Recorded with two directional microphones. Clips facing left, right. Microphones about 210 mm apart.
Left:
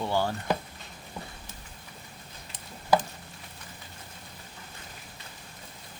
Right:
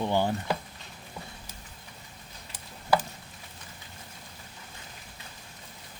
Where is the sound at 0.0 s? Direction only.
15° right (ahead or behind).